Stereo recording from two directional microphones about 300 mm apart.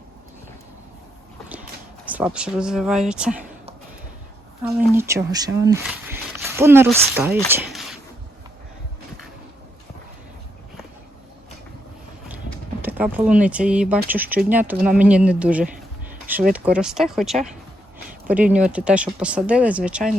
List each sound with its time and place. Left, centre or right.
2.1 s speech: centre
4.9 s speech: centre
7.5 s a sound: centre
12.8 s speech: centre